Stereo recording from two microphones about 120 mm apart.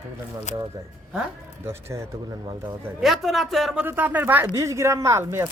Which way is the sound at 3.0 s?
Centre (ahead or behind).